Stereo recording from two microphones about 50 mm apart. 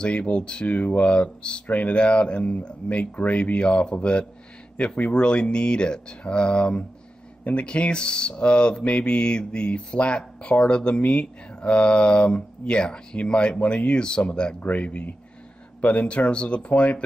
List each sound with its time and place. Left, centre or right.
0.0 s speech: left